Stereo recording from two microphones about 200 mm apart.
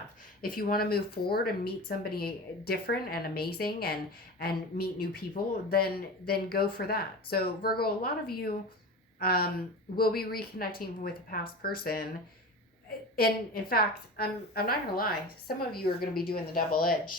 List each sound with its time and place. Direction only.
0.4 s speech: 45° left (ahead or behind)
13.1 s speech: 50° left (ahead or behind)